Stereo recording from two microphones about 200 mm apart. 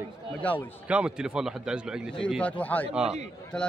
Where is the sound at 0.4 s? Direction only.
10° left (ahead or behind).